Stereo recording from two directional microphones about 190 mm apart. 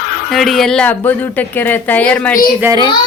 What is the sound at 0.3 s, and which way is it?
Speech, centre (ahead or behind).